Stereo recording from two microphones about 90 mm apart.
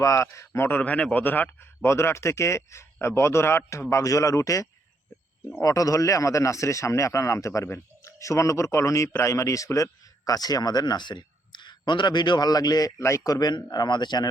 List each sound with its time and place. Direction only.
0.0 s speech: 35° left (ahead or behind)
0.8 s speech: 15° left (ahead or behind); by 12.9 s 45° left (ahead or behind)
13.0 s speech: 35° left (ahead or behind); by 14.3 s 55° left (ahead or behind)